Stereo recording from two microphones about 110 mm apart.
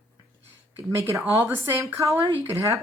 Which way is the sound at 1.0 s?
25° right (ahead or behind).